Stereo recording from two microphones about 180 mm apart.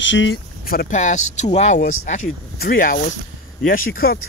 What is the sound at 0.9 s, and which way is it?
Speech, 40° left (ahead or behind).